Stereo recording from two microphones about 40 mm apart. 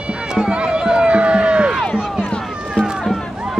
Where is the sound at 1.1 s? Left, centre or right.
Right.